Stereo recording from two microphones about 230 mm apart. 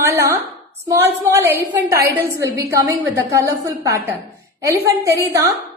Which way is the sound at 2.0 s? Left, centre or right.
Right.